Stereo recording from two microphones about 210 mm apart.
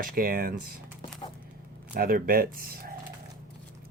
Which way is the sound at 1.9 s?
45° right (ahead or behind).